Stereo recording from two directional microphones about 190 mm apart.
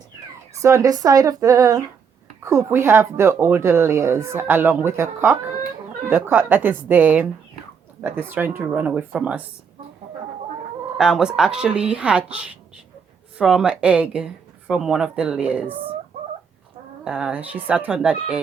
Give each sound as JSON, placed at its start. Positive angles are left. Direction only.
{"t": 0.6, "sound": "speech", "side_deg": -15}
{"t": 10.9, "sound": "speech", "side_deg": -5}
{"t": 17.0, "sound": "speech", "side_deg": -5}